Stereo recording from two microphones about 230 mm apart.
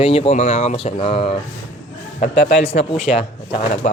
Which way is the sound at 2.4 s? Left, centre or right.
Left.